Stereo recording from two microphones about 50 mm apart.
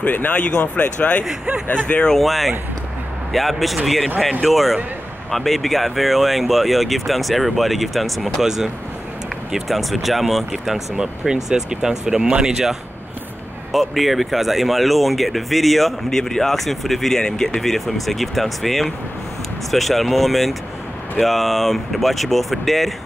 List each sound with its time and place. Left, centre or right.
0.0 s speech: left
1.2 s speech: centre
2.0 s speech: centre
13.7 s speech: centre